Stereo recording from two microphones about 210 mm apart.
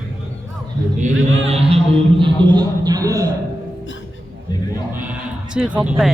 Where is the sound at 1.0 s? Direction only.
30° right (ahead or behind).